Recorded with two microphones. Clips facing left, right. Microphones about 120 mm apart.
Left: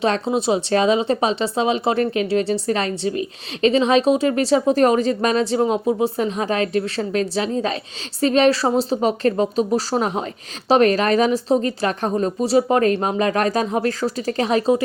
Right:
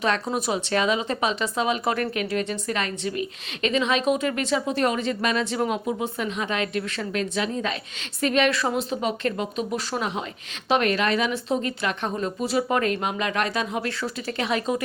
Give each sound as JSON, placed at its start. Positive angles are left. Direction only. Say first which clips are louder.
{"t": 0.0, "sound": "speech", "louder": "left 5 dB", "side_deg": 30}